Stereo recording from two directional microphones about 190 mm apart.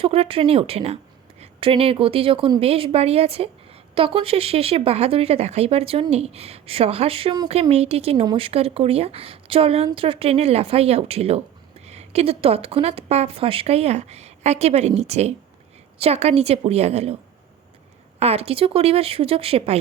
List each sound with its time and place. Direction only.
0.0 s a woman's voice: 30° right (ahead or behind)
18.2 s speech: 35° right (ahead or behind)